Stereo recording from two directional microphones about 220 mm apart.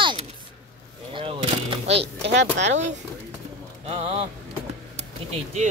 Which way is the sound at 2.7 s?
30° right (ahead or behind).